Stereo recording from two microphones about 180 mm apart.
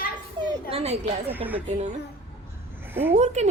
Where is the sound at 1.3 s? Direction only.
10° right (ahead or behind).